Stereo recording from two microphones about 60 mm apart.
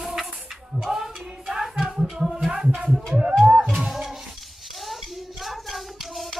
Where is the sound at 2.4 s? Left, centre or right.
Centre.